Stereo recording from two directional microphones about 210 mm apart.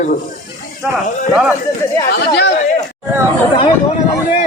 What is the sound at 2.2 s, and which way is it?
Speech, 50° left (ahead or behind).